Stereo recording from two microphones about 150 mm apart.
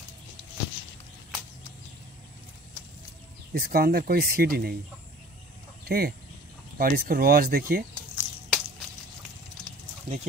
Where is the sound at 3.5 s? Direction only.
80° right.